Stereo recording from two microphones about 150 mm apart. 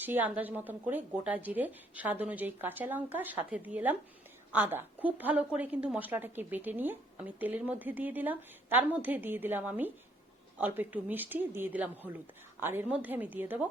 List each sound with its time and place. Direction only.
0.0 s a woman's voice: 10° right (ahead or behind)